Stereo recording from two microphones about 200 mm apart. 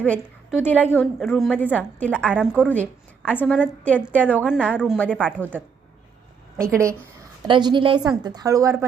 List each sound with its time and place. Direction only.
0.6 s a woman's voice: 10° left (ahead or behind)
4.4 s a woman's voice: 5° right (ahead or behind)
6.6 s a woman's voice: 15° right (ahead or behind)